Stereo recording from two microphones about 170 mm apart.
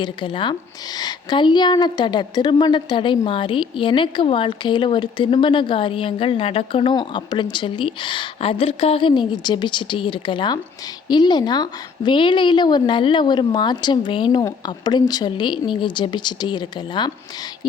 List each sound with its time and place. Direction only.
0.0 s a woman's voice: 30° left (ahead or behind)